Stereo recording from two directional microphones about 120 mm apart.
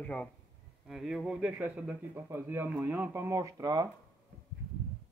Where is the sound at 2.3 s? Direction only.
20° right (ahead or behind).